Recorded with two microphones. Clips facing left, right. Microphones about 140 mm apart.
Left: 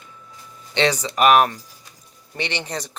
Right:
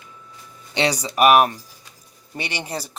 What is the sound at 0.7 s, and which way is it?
Speech, 15° right (ahead or behind).